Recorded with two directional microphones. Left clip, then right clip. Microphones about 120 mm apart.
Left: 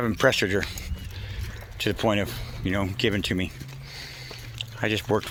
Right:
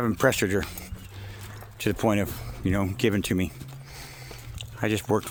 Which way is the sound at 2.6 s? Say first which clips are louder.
Even; 55° right (ahead or behind).